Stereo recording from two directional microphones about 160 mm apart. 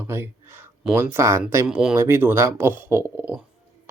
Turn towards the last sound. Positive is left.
turn(degrees=-15)  # may be behind; listen again after turning